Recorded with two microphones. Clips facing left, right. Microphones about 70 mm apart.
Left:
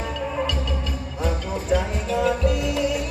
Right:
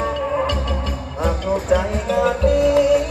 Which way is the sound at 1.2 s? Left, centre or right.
Right.